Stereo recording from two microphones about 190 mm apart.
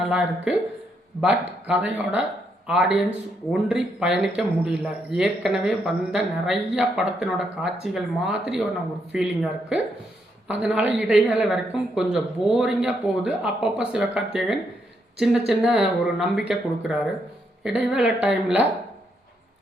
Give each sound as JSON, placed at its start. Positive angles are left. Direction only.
{"t": 0.0, "sound": "a woman's voice", "side_deg": -5}